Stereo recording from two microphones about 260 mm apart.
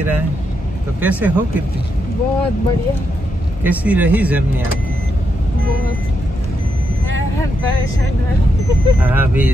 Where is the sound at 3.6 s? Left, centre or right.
Centre.